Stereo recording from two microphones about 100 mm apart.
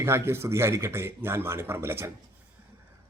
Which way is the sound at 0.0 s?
25° right (ahead or behind).